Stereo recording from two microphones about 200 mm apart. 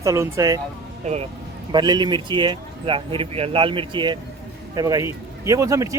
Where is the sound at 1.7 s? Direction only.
20° right (ahead or behind).